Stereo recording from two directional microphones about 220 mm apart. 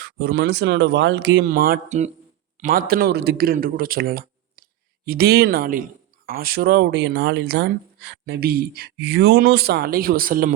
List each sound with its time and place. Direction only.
0.0 s a man's voice: 45° right (ahead or behind)